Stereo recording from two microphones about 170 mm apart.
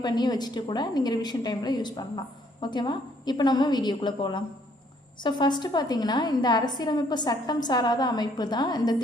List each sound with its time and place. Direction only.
0.0 s a woman's voice: 25° left (ahead or behind)